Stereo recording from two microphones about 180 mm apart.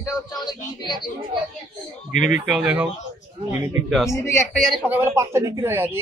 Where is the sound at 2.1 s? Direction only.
45° left (ahead or behind).